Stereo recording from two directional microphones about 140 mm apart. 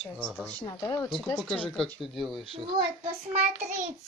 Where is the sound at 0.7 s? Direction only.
30° left (ahead or behind).